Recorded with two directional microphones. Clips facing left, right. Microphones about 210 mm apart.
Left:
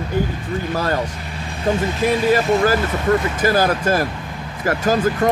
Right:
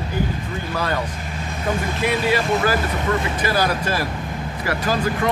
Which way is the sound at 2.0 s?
45° left (ahead or behind).